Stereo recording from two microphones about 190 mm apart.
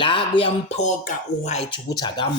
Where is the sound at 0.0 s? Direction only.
25° left (ahead or behind).